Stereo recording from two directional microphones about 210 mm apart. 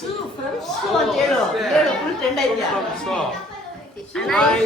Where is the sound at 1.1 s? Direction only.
Centre (ahead or behind).